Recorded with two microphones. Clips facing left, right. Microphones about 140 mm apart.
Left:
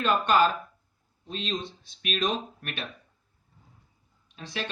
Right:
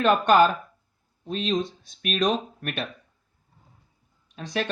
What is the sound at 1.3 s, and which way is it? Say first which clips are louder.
Speech: right 7 dB; 45° right (ahead or behind).